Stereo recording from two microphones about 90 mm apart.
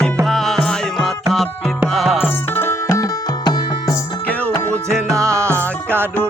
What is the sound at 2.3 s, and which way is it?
Music, 25° left (ahead or behind).